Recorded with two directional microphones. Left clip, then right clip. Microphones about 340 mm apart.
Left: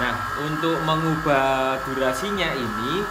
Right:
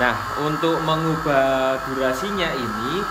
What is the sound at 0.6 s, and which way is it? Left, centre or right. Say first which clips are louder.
Speech: even; centre.